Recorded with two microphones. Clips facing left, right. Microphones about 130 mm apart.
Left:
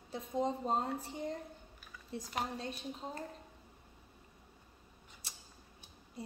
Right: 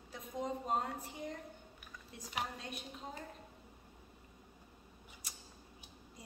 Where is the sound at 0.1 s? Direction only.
30° left (ahead or behind).